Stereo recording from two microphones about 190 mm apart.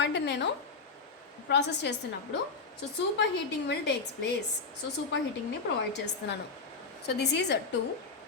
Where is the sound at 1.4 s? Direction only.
65° left (ahead or behind).